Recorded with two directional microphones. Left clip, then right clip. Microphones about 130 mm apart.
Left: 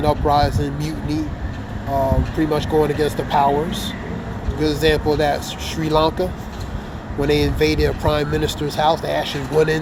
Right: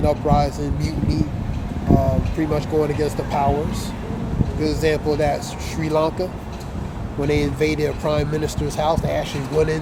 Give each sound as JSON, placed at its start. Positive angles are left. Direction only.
{"t": 0.0, "sound": "speech", "side_deg": 0}
{"t": 2.5, "sound": "speech", "side_deg": 5}
{"t": 4.6, "sound": "speech", "side_deg": 0}